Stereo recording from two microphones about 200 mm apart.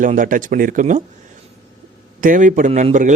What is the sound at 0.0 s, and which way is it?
Speech, 40° right (ahead or behind).